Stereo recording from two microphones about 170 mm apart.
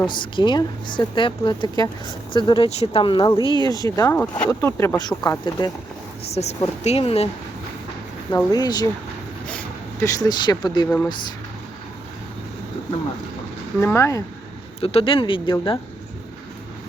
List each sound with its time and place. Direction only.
0.0 s speech: 25° left (ahead or behind)
6.3 s speech: 40° left (ahead or behind)
8.3 s speech: 20° left (ahead or behind)
10.0 s speech: 20° left (ahead or behind)
10.8 s speech: 10° left (ahead or behind)
13.8 s speech: 15° left (ahead or behind)
14.8 s speech: 35° left (ahead or behind)